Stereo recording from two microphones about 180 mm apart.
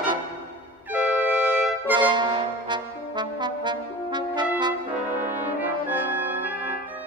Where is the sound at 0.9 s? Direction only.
5° right (ahead or behind).